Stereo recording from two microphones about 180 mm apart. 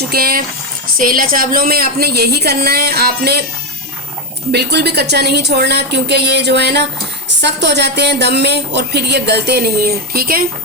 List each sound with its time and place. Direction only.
0.1 s a woman's voice: 55° right (ahead or behind)
4.5 s a woman's voice: 65° right (ahead or behind)